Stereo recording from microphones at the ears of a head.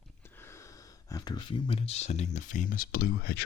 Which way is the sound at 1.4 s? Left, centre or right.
Left.